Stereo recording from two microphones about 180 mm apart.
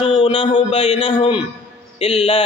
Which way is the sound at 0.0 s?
30° left (ahead or behind).